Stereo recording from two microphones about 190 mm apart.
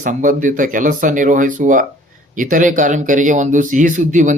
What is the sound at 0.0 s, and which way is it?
Speech, 45° right (ahead or behind).